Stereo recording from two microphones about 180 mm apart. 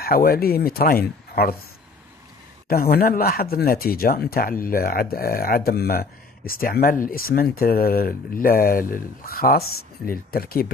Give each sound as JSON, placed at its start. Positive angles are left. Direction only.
{"t": 0.0, "sound": "speech", "side_deg": 55}
{"t": 2.7, "sound": "speech", "side_deg": 55}